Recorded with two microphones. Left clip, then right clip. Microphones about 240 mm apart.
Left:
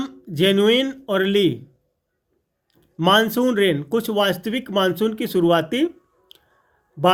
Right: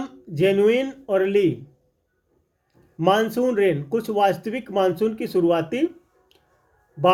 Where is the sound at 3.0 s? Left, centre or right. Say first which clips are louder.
Left 2 dB; left.